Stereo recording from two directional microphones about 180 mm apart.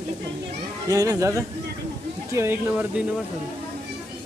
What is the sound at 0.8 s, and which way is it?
Speech, 20° right (ahead or behind).